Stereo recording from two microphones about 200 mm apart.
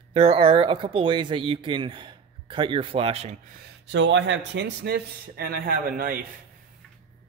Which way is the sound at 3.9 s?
65° right (ahead or behind).